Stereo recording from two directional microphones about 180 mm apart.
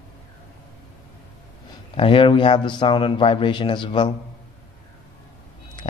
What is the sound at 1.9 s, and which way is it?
A man's voice, 30° left (ahead or behind).